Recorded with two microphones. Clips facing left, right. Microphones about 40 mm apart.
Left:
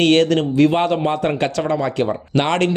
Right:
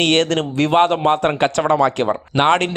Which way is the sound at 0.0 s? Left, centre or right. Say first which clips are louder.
Left 2 dB; right.